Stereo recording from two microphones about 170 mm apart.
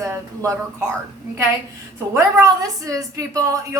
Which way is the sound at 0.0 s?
20° right (ahead or behind).